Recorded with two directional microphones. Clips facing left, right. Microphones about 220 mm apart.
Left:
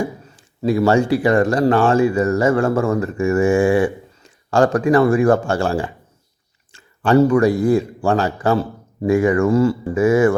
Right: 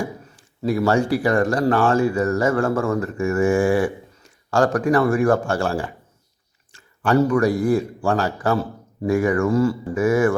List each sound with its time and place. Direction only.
0.6 s speech: 25° left (ahead or behind)